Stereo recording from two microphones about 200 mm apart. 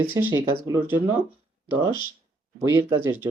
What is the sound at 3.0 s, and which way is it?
Speech, 10° right (ahead or behind).